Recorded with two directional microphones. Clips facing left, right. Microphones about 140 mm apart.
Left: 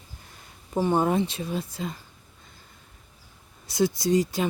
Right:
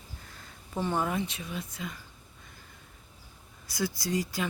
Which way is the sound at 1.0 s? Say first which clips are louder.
Left 7 dB; 30° left (ahead or behind).